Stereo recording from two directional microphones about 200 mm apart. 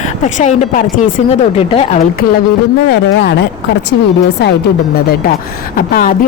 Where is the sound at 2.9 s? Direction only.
60° left (ahead or behind).